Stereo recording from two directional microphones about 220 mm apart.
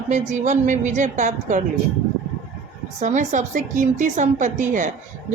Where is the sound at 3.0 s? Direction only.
35° right (ahead or behind).